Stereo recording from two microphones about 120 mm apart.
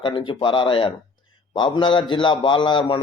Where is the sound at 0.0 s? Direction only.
45° left (ahead or behind).